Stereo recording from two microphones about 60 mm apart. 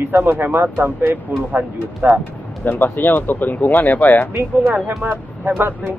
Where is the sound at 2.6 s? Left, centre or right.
Left.